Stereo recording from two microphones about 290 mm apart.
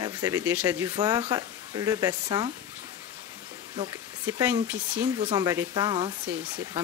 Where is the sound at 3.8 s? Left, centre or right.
Centre.